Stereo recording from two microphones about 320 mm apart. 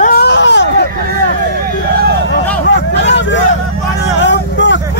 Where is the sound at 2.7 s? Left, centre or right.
Left.